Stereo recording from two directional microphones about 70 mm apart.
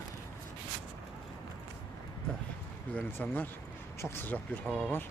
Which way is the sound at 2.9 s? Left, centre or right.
Left.